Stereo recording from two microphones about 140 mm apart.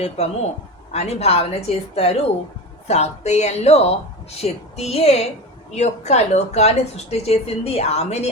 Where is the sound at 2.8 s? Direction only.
50° left (ahead or behind).